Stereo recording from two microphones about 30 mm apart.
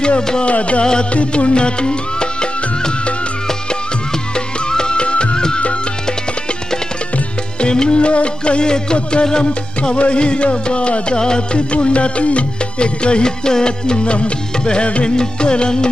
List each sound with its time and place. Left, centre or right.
0.4 s music: left
1.4 s music: left
4.6 s music: left
7.6 s music: left
7.9 s music: left
9.9 s music: left
11.5 s music: left